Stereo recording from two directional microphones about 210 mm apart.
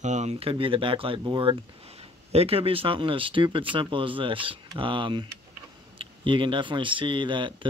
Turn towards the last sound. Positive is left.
turn(degrees=-25)  # may be behind; listen again after turning